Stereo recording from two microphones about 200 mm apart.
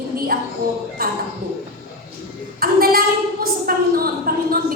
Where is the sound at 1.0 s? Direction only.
50° right (ahead or behind).